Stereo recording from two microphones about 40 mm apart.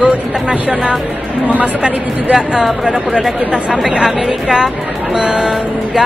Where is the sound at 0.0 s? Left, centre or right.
Right.